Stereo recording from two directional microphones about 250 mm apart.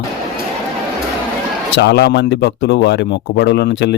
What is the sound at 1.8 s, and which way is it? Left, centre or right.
Speech, left.